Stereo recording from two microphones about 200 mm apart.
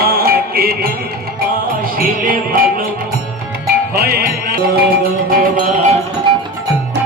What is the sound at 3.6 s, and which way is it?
Music, 50° right (ahead or behind).